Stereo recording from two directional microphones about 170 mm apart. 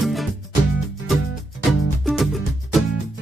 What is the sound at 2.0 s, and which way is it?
Music, centre (ahead or behind).